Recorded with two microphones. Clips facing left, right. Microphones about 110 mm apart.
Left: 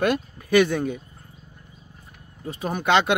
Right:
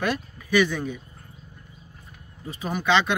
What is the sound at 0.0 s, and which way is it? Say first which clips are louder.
Speech: left 4 dB; 55° left (ahead or behind).